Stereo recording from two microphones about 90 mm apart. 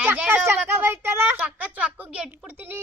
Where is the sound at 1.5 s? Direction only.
15° right (ahead or behind).